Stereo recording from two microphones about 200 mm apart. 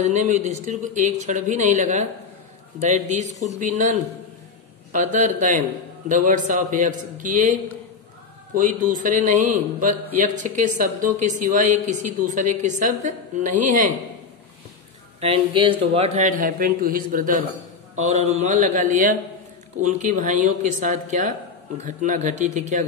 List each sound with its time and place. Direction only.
0.0 s a woman's voice: 35° right (ahead or behind)
4.9 s a woman's voice: 40° right (ahead or behind)
8.5 s a woman's voice: 40° right (ahead or behind)
15.1 s a woman's voice: 30° right (ahead or behind)